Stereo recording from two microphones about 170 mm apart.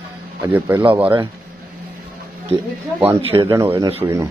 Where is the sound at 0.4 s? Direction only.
10° right (ahead or behind).